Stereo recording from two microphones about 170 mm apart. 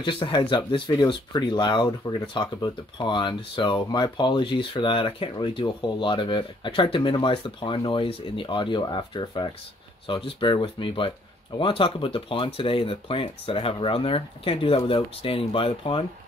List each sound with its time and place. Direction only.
0.0 s speech: 30° left (ahead or behind)